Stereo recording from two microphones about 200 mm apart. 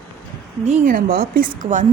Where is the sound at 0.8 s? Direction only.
45° right (ahead or behind).